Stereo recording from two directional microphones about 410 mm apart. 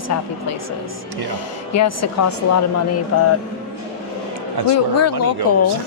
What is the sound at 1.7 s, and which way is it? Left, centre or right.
A woman's voice, left.